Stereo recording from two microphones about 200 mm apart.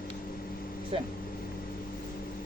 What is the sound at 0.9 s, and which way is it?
Speech, 30° right (ahead or behind).